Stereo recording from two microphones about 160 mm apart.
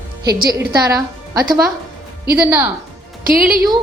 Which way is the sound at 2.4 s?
15° right (ahead or behind).